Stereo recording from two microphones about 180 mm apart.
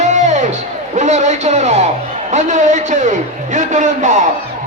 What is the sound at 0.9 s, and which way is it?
A man's voice, 40° right (ahead or behind).